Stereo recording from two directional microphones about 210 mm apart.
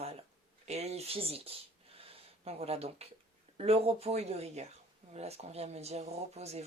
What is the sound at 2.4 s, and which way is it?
Speech, 30° right (ahead or behind).